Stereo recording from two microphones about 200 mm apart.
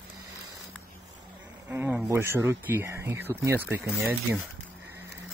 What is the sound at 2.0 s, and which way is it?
Speech, 15° right (ahead or behind).